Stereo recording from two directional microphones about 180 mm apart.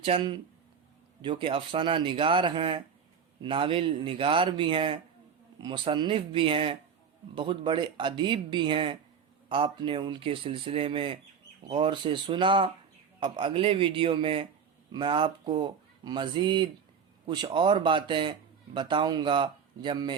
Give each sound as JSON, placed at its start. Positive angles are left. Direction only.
{"t": 0.0, "sound": "a man's voice", "side_deg": -30}